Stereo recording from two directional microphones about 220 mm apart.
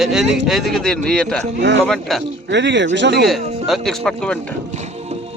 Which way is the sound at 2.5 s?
55° right (ahead or behind).